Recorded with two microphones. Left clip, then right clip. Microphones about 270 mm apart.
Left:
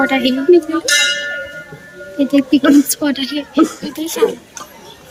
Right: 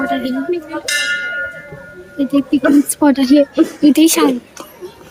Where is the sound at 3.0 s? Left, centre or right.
Centre.